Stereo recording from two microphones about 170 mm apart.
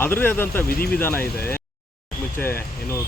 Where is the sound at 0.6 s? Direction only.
60° left (ahead or behind).